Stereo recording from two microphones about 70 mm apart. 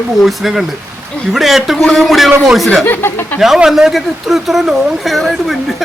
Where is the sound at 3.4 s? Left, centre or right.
Centre.